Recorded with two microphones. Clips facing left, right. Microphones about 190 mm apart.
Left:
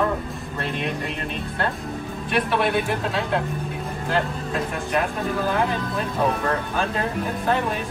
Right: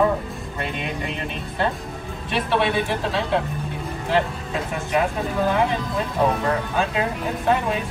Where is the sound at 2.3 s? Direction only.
Centre (ahead or behind).